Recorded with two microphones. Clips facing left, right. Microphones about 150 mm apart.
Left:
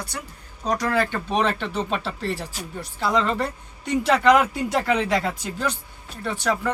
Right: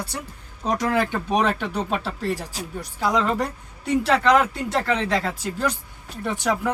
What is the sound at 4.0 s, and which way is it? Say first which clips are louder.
Speech: left 2 dB; centre (ahead or behind).